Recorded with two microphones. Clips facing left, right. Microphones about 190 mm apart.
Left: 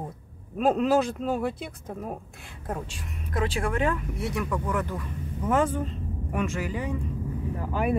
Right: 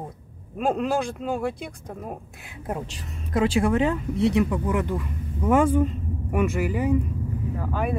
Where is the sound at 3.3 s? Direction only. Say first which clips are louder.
Right 6 dB; 25° right (ahead or behind); by 6.9 s 10° right (ahead or behind).